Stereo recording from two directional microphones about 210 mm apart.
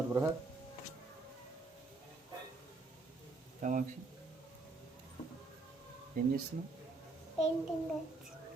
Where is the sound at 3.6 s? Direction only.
40° right (ahead or behind).